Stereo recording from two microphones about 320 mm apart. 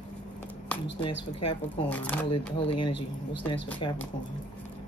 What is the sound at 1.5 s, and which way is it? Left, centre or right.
Speech, centre.